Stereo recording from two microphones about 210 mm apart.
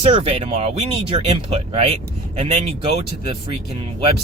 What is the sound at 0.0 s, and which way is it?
Speech, 30° right (ahead or behind).